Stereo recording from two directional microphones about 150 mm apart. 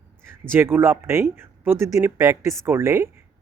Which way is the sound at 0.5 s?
15° right (ahead or behind).